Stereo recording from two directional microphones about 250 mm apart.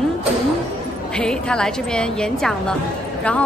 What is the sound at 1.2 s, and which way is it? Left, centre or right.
A woman's voice, centre.